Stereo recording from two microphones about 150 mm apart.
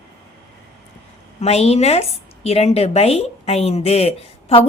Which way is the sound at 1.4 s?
45° left (ahead or behind).